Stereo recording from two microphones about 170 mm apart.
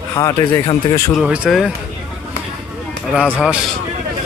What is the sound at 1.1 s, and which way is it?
Speech, 5° right (ahead or behind).